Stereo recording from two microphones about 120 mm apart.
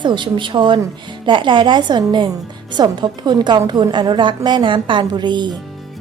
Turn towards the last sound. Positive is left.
turn(degrees=-40)  # may be behind; listen again after turning